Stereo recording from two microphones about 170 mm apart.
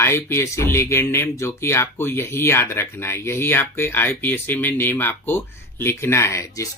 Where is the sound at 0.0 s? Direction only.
15° left (ahead or behind).